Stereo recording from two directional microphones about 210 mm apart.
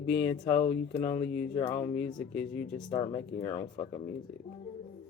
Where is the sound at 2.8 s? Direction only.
25° left (ahead or behind).